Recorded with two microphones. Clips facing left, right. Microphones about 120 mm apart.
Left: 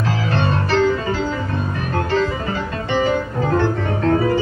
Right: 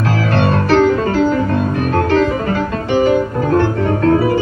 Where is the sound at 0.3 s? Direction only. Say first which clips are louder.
Right 6 dB; 55° right (ahead or behind).